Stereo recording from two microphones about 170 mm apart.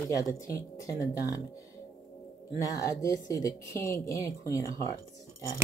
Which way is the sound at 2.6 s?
20° left (ahead or behind).